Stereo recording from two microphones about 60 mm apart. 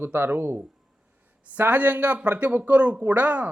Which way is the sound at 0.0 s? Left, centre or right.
Right.